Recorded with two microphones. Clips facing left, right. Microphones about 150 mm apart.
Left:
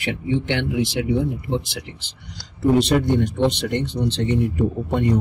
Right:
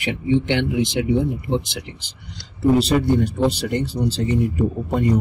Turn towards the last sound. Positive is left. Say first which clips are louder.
# even
turn(degrees=-5)  # may be behind; listen again after turning